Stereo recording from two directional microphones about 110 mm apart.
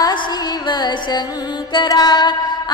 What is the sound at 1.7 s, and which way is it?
Music, 35° left (ahead or behind).